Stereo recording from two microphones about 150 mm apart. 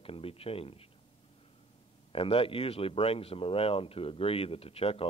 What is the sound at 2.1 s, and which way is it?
Speech, 35° left (ahead or behind).